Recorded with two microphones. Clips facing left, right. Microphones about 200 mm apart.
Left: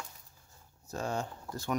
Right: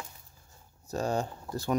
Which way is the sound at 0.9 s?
35° right (ahead or behind).